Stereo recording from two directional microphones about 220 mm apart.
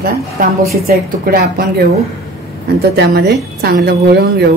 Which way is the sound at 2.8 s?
50° right (ahead or behind).